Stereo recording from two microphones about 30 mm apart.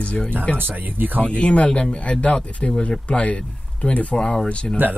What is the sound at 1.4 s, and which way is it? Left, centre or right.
Speech, left.